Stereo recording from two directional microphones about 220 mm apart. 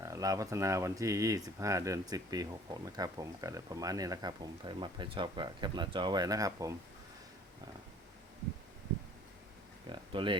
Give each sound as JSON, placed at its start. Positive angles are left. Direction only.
{"t": 0.0, "sound": "speech", "side_deg": -15}
{"t": 9.9, "sound": "speech", "side_deg": -20}